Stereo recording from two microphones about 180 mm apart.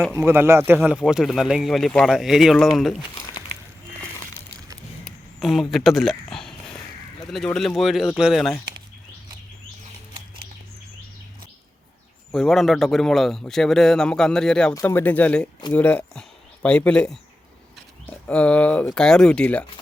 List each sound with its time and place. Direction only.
0.1 s speech: 15° right (ahead or behind)
0.8 s a man's voice: centre (ahead or behind)
3.2 s a sound: 20° left (ahead or behind)
5.4 s a man's voice: centre (ahead or behind)
12.3 s a man's voice: centre (ahead or behind)
14.7 s a man's voice: 15° left (ahead or behind)